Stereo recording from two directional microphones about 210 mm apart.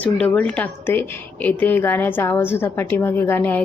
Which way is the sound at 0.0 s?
5° left (ahead or behind).